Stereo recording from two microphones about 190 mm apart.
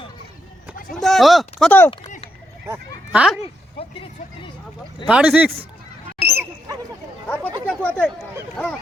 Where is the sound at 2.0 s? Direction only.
40° left (ahead or behind).